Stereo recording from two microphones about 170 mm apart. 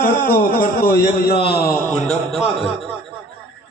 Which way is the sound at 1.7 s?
5° left (ahead or behind).